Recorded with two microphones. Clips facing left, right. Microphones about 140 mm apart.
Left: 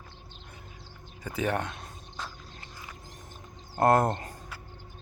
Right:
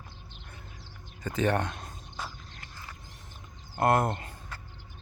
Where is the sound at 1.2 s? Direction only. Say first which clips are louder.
Right 2 dB; 10° left (ahead or behind).